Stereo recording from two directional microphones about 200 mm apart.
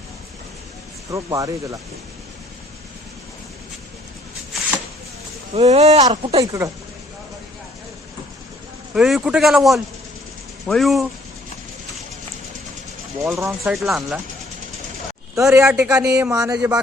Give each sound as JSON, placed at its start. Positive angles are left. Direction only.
{"t": 1.1, "sound": "a man's voice", "side_deg": -15}
{"t": 5.5, "sound": "a man's voice", "side_deg": -30}
{"t": 9.0, "sound": "speech", "side_deg": 0}
{"t": 13.2, "sound": "speech", "side_deg": -10}
{"t": 15.4, "sound": "a man's voice", "side_deg": -10}
{"t": 16.6, "sound": "a man's voice", "side_deg": -5}